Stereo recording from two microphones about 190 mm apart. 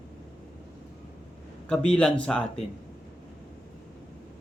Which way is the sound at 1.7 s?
5° left (ahead or behind).